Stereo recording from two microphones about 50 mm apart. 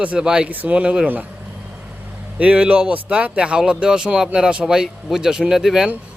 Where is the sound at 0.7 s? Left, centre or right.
Right.